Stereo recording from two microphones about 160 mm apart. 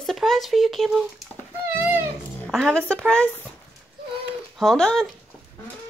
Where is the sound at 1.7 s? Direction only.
10° right (ahead or behind).